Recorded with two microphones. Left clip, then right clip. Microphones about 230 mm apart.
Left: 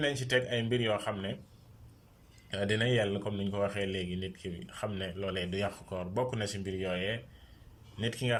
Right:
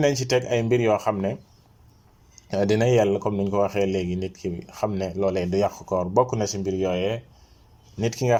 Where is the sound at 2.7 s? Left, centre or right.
Right.